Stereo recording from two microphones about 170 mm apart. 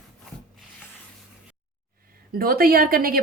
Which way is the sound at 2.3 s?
60° right (ahead or behind).